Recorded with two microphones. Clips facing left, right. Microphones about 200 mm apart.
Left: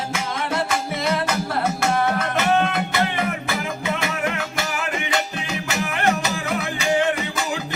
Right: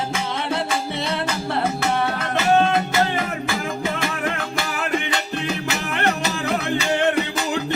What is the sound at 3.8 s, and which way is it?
Music, 50° right (ahead or behind).